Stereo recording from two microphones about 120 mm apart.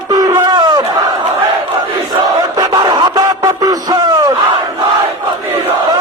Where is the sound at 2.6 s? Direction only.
35° right (ahead or behind).